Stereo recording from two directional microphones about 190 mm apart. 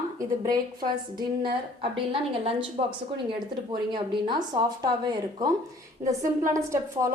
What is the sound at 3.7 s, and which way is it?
Speech, 25° right (ahead or behind).